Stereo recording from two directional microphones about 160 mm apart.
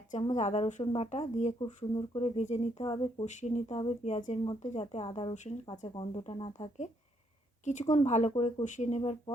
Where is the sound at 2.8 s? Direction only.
30° left (ahead or behind).